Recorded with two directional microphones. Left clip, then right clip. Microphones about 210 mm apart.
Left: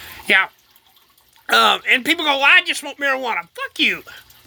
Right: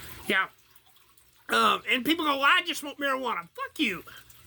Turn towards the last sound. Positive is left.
turn(degrees=-10)  # may be behind; listen again after turning